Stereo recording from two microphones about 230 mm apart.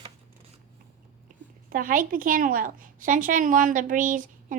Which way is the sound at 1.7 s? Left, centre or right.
Right.